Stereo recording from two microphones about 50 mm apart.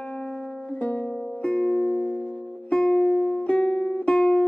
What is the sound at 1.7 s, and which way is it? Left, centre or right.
Music, centre.